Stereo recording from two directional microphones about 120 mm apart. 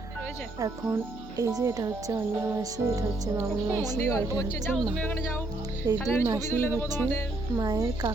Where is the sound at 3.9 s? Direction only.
30° left (ahead or behind).